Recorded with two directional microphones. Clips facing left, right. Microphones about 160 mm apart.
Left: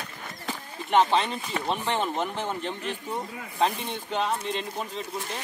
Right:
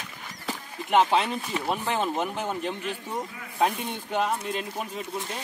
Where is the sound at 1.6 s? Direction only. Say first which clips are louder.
Even; 10° right (ahead or behind).